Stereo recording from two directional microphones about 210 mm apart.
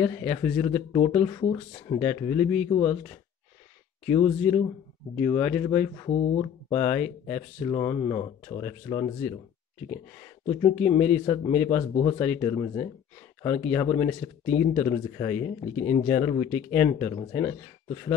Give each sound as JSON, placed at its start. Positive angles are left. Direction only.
{"t": 0.0, "sound": "speech", "side_deg": 10}
{"t": 1.4, "sound": "speech", "side_deg": 25}
{"t": 2.0, "sound": "speech", "side_deg": 10}
{"t": 6.3, "sound": "speech", "side_deg": 15}
{"t": 10.4, "sound": "speech", "side_deg": 10}